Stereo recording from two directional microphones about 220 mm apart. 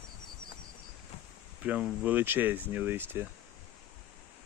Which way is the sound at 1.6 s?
5° right (ahead or behind).